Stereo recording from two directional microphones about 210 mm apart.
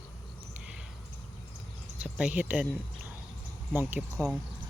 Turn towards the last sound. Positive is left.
turn(degrees=-10)  # may be behind; listen again after turning